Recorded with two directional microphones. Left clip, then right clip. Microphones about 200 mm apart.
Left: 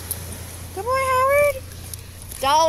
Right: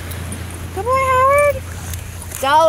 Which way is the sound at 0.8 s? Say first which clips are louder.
Right 5 dB; 30° left (ahead or behind).